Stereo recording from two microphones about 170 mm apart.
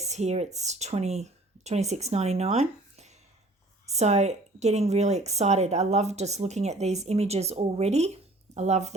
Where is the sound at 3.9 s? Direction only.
40° right (ahead or behind).